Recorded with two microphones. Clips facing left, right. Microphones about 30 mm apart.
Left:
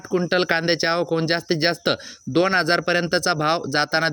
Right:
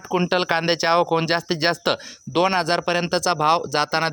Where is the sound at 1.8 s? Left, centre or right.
Centre.